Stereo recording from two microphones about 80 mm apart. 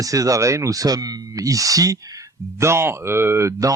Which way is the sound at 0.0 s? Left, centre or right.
Right.